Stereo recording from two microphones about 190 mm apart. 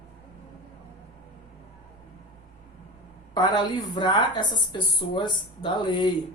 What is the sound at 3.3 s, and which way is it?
A woman's voice, 20° left (ahead or behind).